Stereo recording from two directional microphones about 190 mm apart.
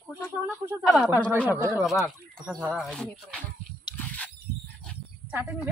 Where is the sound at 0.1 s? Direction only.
15° right (ahead or behind).